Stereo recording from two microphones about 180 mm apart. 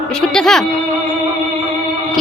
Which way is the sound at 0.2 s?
5° left (ahead or behind).